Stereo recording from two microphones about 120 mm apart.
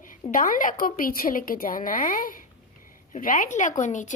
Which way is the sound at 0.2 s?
60° left (ahead or behind).